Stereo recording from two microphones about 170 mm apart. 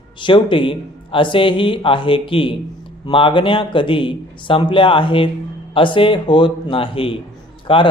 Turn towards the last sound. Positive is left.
turn(degrees=30)  # may be behind; listen again after turning